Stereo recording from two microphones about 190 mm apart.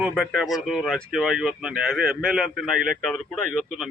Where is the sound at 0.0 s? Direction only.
Centre (ahead or behind).